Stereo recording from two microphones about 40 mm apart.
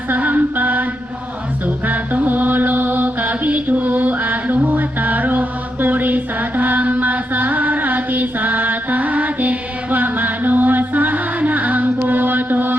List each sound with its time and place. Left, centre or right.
0.2 s mantra: right